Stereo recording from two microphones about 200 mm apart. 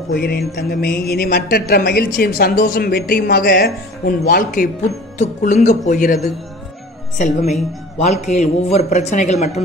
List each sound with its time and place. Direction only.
0.1 s a woman's voice: 50° left (ahead or behind)
5.2 s a man's voice: 35° left (ahead or behind)
7.2 s a man's voice: 35° left (ahead or behind)